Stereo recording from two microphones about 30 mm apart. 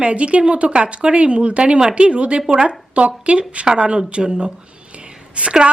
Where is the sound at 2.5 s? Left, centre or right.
Right.